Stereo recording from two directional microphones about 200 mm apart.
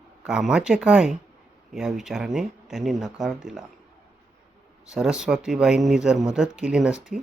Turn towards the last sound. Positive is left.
turn(degrees=-5)  # may be behind; listen again after turning